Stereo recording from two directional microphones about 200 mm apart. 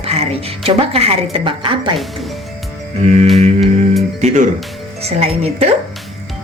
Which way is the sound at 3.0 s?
35° right (ahead or behind).